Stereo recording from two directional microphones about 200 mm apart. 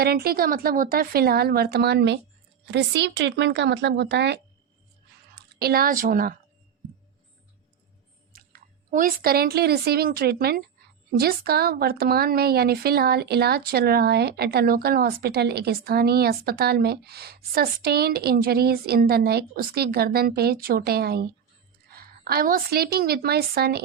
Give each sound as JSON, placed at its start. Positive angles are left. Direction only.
{"t": 0.0, "sound": "a woman's voice", "side_deg": -50}
{"t": 8.3, "sound": "a woman's voice", "side_deg": -45}